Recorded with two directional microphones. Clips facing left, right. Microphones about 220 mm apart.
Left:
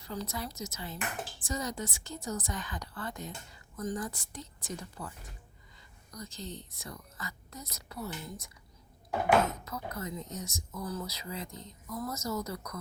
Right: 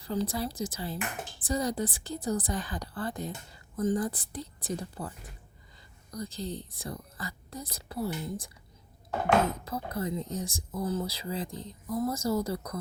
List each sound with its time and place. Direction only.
0.0 s a woman's voice: 30° right (ahead or behind)
9.5 s a woman's voice: 30° right (ahead or behind)